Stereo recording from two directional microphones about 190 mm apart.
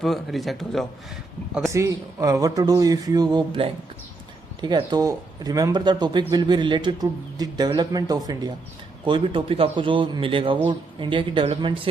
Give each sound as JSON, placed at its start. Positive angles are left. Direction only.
{"t": 0.0, "sound": "a man's voice", "side_deg": 0}
{"t": 1.7, "sound": "speech", "side_deg": -15}